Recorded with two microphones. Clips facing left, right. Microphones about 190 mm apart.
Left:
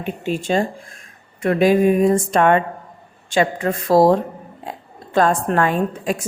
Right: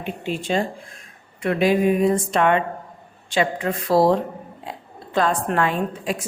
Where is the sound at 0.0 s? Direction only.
45° left (ahead or behind).